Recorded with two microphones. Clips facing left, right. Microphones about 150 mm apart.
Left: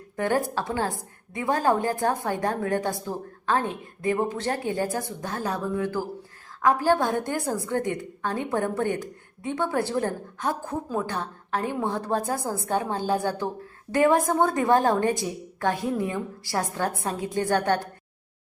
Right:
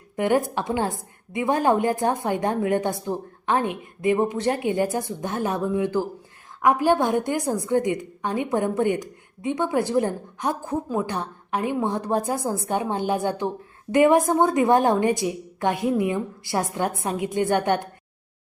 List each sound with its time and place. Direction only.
0.2 s a woman's voice: 20° right (ahead or behind)